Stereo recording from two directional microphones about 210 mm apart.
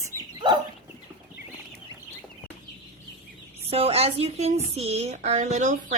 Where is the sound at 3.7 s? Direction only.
30° right (ahead or behind).